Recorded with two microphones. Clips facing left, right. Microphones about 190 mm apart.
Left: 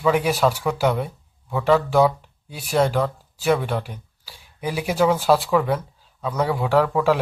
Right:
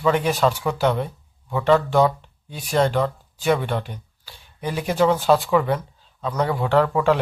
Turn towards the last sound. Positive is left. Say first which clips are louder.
# even
turn(degrees=5)  # may be behind; listen again after turning